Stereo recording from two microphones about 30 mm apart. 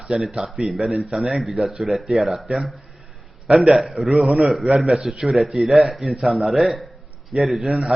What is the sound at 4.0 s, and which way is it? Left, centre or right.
Speech, centre.